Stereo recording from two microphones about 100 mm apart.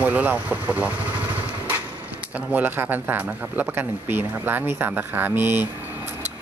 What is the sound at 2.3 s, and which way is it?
Speech, 20° right (ahead or behind).